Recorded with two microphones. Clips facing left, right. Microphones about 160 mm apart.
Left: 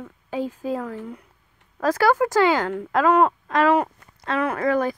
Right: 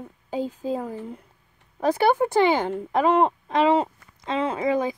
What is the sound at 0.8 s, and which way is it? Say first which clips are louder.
Speech: left 1 dB; 25° right (ahead or behind).